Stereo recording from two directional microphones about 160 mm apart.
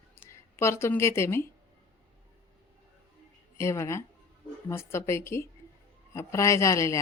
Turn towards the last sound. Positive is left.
turn(degrees=20)  # may be behind; listen again after turning